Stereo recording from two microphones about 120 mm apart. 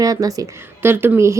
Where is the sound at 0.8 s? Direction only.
15° right (ahead or behind).